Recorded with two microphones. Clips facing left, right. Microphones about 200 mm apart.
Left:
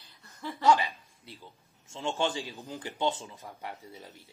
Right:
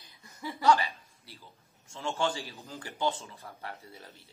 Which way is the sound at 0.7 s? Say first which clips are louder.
Left 1 dB; 15° left (ahead or behind).